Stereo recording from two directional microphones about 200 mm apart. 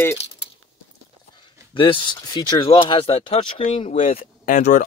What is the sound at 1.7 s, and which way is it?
Speech, 25° left (ahead or behind).